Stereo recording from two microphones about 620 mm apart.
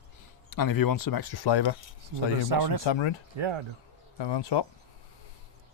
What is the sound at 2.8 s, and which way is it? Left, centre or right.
Speech, left.